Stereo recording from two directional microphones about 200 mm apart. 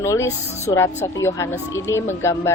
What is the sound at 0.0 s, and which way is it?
Speech, 15° left (ahead or behind).